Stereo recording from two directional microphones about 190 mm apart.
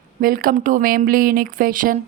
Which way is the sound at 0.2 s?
50° right (ahead or behind).